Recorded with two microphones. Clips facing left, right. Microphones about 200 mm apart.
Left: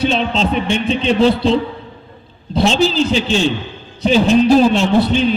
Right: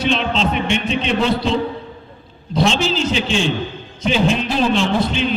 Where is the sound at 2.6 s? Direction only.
35° left (ahead or behind).